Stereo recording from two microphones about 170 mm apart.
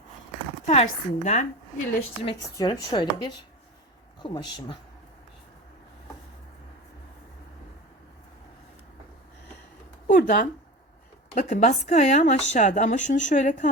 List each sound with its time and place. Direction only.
0.6 s a woman's voice: 40° left (ahead or behind)
2.2 s a woman's voice: 25° left (ahead or behind)
10.1 s a sound: 50° left (ahead or behind)
11.3 s speech: 45° left (ahead or behind)